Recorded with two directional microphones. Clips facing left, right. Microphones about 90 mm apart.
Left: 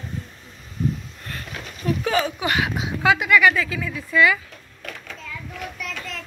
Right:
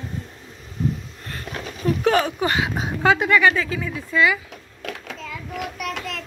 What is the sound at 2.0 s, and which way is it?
Speech, 55° right (ahead or behind).